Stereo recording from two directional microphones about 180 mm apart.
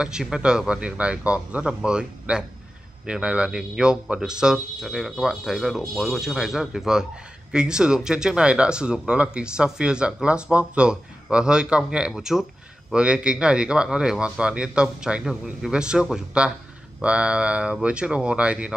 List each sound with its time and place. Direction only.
0.0 s speech: 5° right (ahead or behind)